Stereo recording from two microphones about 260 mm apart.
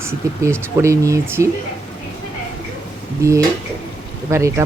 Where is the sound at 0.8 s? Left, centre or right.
Centre.